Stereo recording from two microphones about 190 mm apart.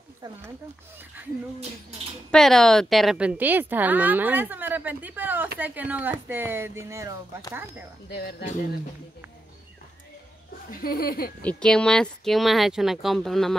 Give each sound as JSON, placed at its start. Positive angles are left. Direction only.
{"t": 2.3, "sound": "a woman's voice", "side_deg": 0}
{"t": 8.1, "sound": "speech", "side_deg": 60}
{"t": 10.7, "sound": "speech", "side_deg": 50}
{"t": 11.4, "sound": "speech", "side_deg": 5}